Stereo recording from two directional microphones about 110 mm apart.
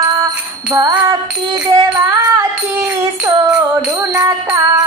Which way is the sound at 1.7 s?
30° right (ahead or behind).